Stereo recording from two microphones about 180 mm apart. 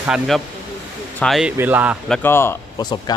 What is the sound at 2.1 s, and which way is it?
Speech, 10° left (ahead or behind).